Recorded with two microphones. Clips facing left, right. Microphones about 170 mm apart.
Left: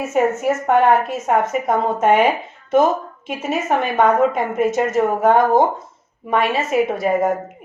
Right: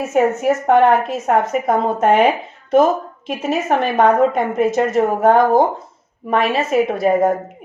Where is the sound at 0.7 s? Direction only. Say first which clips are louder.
Right 2 dB; 35° right (ahead or behind).